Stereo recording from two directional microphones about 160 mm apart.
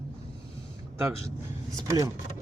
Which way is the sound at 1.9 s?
25° right (ahead or behind).